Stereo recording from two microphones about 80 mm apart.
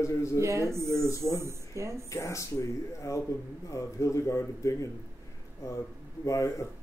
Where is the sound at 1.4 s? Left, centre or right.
Right.